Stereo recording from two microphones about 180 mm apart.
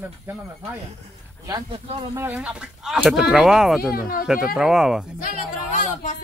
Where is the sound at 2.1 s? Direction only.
10° right (ahead or behind).